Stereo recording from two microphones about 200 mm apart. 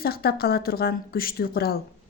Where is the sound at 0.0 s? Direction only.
50° left (ahead or behind).